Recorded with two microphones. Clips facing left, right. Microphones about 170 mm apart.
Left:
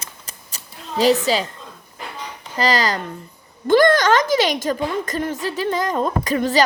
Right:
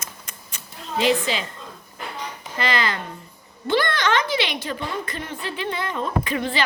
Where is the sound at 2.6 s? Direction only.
40° left (ahead or behind).